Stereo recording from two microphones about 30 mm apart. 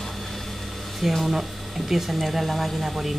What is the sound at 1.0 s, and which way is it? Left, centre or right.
Speech, centre.